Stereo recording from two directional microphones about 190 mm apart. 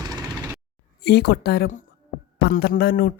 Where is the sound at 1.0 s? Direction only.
60° left (ahead or behind).